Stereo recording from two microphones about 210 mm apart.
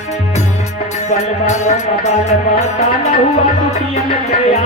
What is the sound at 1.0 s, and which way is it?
Music, 30° left (ahead or behind).